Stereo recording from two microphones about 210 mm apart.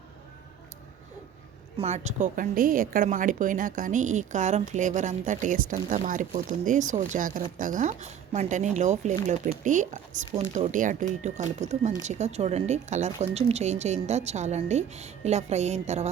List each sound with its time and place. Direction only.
1.8 s a woman's voice: 30° right (ahead or behind)